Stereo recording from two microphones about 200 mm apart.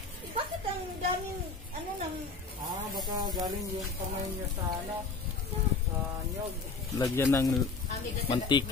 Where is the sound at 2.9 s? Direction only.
20° right (ahead or behind).